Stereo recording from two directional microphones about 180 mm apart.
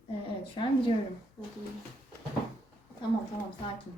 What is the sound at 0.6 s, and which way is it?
Speech, 30° left (ahead or behind).